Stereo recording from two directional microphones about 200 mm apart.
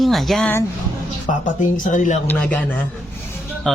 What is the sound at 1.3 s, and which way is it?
Speech, 40° left (ahead or behind).